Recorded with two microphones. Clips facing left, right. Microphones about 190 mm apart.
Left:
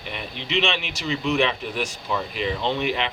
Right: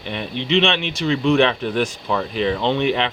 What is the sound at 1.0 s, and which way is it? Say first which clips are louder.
Speech: right 6 dB; 55° right (ahead or behind).